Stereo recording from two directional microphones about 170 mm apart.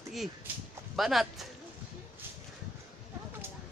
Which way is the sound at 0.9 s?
Centre (ahead or behind).